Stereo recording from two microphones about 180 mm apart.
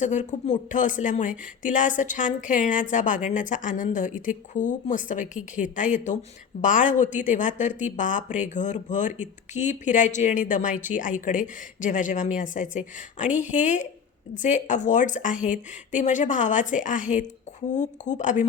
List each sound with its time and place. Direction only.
0.0 s speech: 45° left (ahead or behind)